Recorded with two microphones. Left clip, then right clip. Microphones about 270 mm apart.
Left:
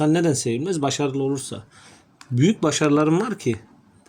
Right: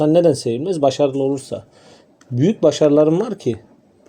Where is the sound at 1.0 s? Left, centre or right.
Left.